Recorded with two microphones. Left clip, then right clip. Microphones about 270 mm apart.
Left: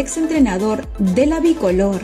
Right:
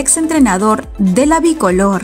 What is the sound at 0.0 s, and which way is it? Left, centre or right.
A woman's voice, right.